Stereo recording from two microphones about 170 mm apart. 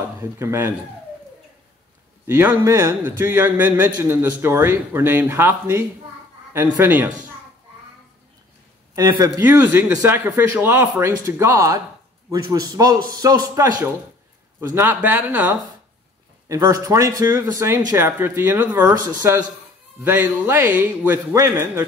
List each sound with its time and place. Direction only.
0.2 s a man's voice: 15° right (ahead or behind)
2.2 s a man's voice: 15° right (ahead or behind)
9.2 s a man's voice: 15° right (ahead or behind)